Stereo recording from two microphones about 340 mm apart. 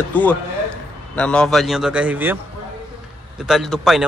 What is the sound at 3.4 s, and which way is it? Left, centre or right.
Speech, centre.